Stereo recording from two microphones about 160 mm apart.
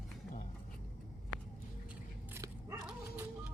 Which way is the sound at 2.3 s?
20° right (ahead or behind).